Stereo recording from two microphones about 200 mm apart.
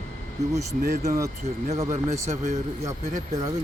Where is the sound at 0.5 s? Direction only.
15° right (ahead or behind).